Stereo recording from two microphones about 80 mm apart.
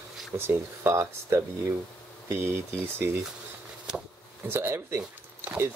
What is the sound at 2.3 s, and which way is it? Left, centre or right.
Speech, right.